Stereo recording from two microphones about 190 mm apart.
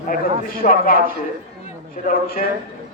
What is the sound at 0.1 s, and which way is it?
Speech, 50° left (ahead or behind).